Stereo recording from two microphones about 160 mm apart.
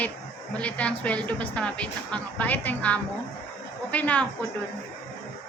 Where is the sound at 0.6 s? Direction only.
10° left (ahead or behind).